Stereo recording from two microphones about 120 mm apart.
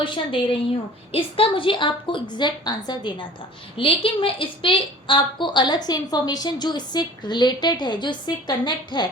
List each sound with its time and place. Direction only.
0.0 s a woman's voice: 45° left (ahead or behind)